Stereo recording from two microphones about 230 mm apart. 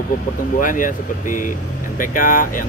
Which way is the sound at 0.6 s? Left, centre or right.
Left.